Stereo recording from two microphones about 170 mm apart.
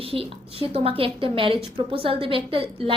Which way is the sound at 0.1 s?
35° right (ahead or behind).